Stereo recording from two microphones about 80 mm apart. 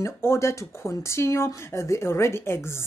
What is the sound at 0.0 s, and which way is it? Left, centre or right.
Speech, left.